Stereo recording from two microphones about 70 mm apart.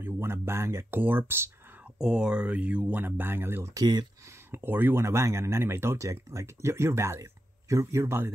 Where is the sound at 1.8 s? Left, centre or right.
Centre; by 3.6 s right.